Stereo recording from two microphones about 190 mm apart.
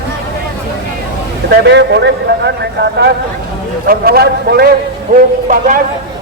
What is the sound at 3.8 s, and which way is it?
Speech, 50° right (ahead or behind).